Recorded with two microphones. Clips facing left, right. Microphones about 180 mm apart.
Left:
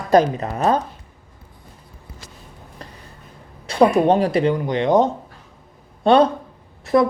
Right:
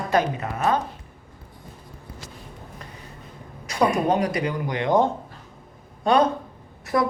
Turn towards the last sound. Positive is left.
turn(degrees=25)  # may be behind; listen again after turning